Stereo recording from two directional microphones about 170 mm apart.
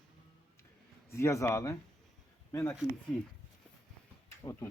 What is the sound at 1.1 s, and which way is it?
Speech, 15° left (ahead or behind).